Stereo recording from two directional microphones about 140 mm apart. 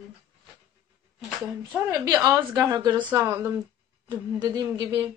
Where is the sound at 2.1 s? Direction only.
25° right (ahead or behind).